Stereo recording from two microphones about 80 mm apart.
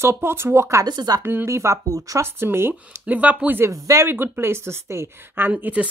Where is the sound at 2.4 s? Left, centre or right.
Right.